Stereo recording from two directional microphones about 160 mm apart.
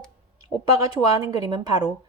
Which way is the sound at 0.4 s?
25° right (ahead or behind).